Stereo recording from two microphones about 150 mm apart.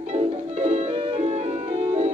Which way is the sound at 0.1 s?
45° right (ahead or behind).